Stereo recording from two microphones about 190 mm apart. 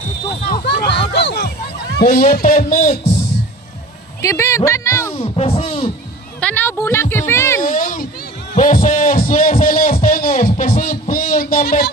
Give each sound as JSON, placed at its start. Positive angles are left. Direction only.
{"t": 0.6, "sound": "a sound", "side_deg": 60}
{"t": 2.0, "sound": "a man's voice", "side_deg": 50}
{"t": 4.2, "sound": "speech", "side_deg": 15}
{"t": 5.1, "sound": "speech", "side_deg": 30}
{"t": 6.4, "sound": "speech", "side_deg": 10}
{"t": 7.6, "sound": "a sound", "side_deg": 45}
{"t": 8.5, "sound": "music", "side_deg": 40}